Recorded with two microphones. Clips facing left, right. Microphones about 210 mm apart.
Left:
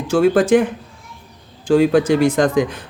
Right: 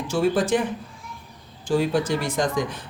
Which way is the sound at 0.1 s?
75° left (ahead or behind).